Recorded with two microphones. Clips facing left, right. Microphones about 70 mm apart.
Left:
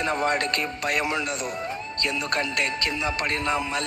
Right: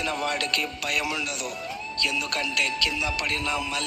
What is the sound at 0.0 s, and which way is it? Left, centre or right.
A man's voice, left.